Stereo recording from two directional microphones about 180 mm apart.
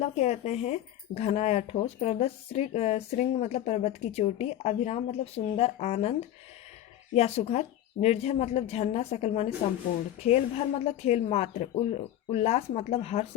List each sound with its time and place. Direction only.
0.0 s speech: 40° left (ahead or behind)